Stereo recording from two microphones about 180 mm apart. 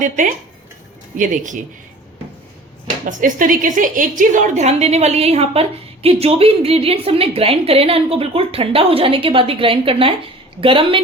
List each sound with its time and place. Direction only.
0.0 s speech: 45° right (ahead or behind)
3.1 s a woman's voice: 50° right (ahead or behind); by 11.0 s 30° right (ahead or behind)